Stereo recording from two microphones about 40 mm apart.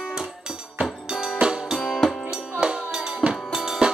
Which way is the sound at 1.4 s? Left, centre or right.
Right.